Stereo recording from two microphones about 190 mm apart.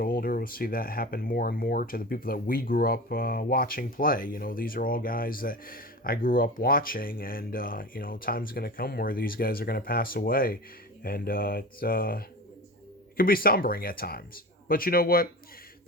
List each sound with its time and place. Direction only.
0.0 s speech: 50° left (ahead or behind)